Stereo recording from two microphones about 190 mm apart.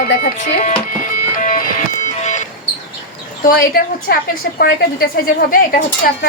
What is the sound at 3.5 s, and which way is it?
Speech, 50° left (ahead or behind).